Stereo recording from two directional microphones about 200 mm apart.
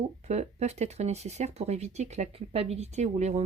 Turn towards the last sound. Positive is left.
turn(degrees=-35)  # may be behind; listen again after turning